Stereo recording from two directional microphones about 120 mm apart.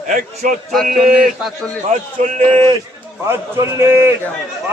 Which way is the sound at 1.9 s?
90° right.